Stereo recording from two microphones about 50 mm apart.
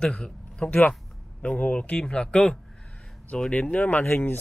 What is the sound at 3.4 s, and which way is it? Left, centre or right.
Speech, left.